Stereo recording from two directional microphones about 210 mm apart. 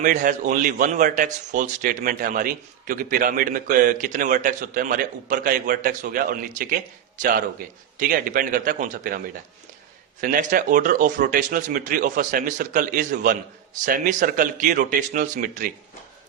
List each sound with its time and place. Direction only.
0.0 s speech: 40° right (ahead or behind)